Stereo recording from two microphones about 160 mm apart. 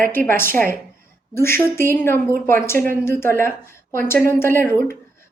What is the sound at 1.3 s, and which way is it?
A woman's voice, 15° left (ahead or behind).